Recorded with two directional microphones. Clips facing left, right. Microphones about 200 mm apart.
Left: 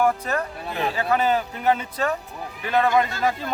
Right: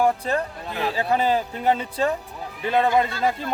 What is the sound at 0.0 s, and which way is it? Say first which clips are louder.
A man's voice: right 1 dB; 30° right (ahead or behind).